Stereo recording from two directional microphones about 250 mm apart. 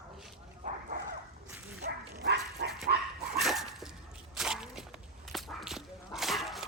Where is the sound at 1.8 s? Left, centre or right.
Right.